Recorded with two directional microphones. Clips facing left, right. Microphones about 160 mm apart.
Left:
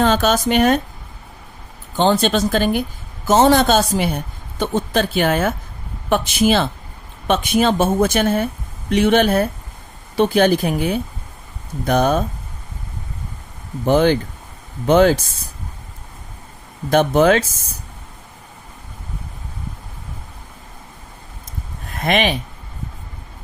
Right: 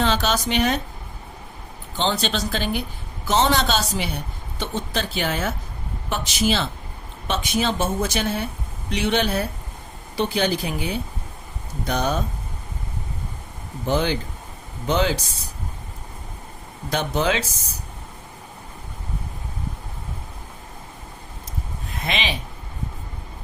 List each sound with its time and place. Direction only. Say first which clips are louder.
0.0 s a woman's voice: left 6 dB; 50° left (ahead or behind)
2.0 s a woman's voice: left 8 dB; 50° left (ahead or behind)
13.8 s a woman's voice: left 8 dB; 55° left (ahead or behind)
16.9 s a woman's voice: left 9 dB; 50° left (ahead or behind)
21.8 s a sound: left 9 dB; 55° left (ahead or behind)